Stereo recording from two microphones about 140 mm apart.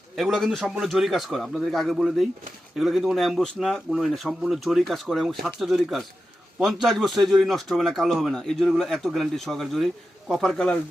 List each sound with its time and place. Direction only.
0.2 s a man's voice: centre (ahead or behind)